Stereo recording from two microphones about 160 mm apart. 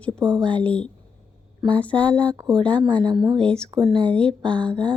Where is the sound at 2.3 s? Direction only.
20° right (ahead or behind).